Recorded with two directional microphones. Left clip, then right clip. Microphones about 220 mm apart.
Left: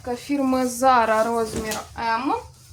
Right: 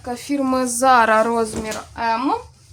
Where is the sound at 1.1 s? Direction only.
45° right (ahead or behind).